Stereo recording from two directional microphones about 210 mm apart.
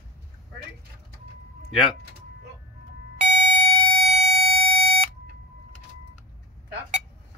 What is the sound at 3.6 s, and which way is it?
Alarm clock, 25° right (ahead or behind).